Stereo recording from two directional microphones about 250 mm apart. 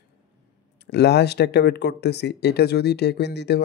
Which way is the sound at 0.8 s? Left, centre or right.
Left.